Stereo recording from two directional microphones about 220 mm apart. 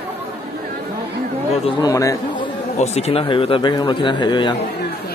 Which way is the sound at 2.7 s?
30° left (ahead or behind).